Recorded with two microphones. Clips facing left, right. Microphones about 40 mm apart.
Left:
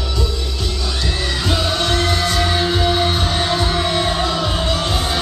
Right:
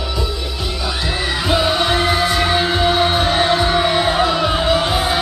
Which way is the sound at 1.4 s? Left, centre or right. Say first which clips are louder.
Right 4 dB; centre.